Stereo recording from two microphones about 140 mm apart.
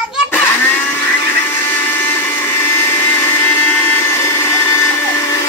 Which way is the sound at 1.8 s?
15° left (ahead or behind).